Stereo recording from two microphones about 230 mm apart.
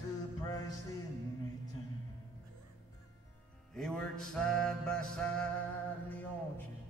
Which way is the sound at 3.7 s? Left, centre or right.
Centre.